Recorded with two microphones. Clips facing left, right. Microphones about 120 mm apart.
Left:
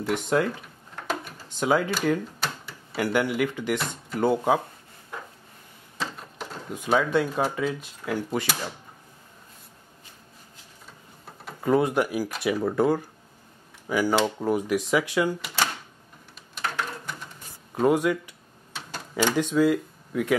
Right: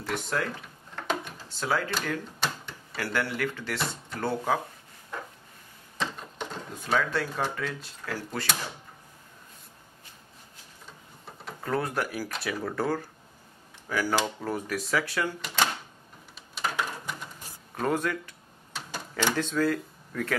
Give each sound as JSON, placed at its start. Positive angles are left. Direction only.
{"t": 0.1, "sound": "speech", "side_deg": 20}
{"t": 0.9, "sound": "drawer open or close", "side_deg": 5}
{"t": 1.5, "sound": "speech", "side_deg": 20}
{"t": 2.4, "sound": "a sound", "side_deg": 5}
{"t": 3.0, "sound": "speech", "side_deg": 15}
{"t": 5.9, "sound": "printer", "side_deg": 5}
{"t": 6.7, "sound": "speech", "side_deg": 15}
{"t": 11.6, "sound": "speech", "side_deg": 15}
{"t": 15.4, "sound": "cash register", "side_deg": 5}
{"t": 16.5, "sound": "a sound", "side_deg": -5}
{"t": 17.7, "sound": "speech", "side_deg": 15}
{"t": 18.7, "sound": "a sound", "side_deg": 0}
{"t": 19.3, "sound": "speech", "side_deg": 15}